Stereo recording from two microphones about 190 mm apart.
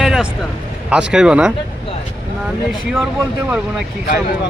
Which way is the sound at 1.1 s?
5° right (ahead or behind).